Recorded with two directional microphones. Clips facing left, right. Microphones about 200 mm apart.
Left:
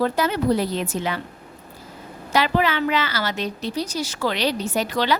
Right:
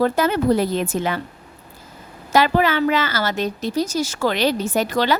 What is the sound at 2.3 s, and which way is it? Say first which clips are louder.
A woman's voice: right 3 dB; 45° right (ahead or behind).